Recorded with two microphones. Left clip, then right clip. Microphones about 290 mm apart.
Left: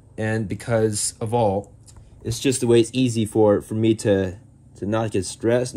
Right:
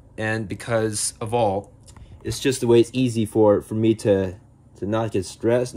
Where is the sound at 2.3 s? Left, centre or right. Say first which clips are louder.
Even; centre.